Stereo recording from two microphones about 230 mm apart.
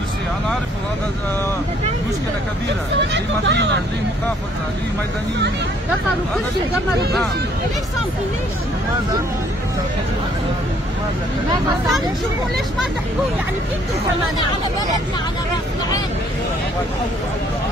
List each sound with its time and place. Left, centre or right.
3.1 s speech: right